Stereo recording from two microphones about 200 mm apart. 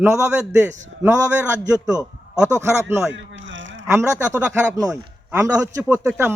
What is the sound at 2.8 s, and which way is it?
Speech, 15° right (ahead or behind).